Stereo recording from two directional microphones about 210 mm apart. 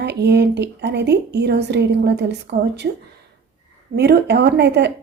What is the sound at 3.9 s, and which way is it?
Speech, 50° right (ahead or behind).